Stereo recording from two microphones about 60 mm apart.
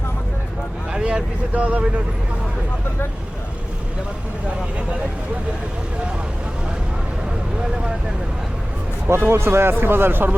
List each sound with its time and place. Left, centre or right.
0.9 s speech: centre
9.0 s a man's voice: right